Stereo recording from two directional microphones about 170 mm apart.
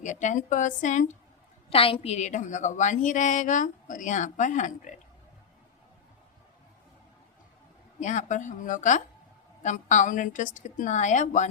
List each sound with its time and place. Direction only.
0.0 s a woman's voice: 45° left (ahead or behind)
1.7 s a woman's voice: 35° left (ahead or behind)
7.9 s a woman's voice: 45° left (ahead or behind)